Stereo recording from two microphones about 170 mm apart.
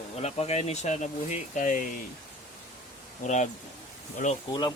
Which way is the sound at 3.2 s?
45° left (ahead or behind).